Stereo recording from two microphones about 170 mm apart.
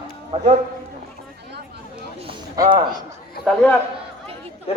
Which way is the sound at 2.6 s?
25° right (ahead or behind).